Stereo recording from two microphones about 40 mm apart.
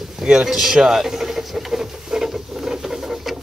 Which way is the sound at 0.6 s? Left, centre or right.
Centre.